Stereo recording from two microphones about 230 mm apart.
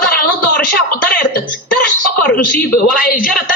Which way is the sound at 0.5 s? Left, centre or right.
Left.